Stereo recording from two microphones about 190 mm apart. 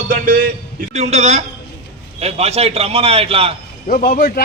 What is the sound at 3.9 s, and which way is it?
Speech, 50° left (ahead or behind).